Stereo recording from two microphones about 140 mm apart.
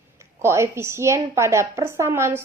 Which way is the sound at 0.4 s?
20° right (ahead or behind).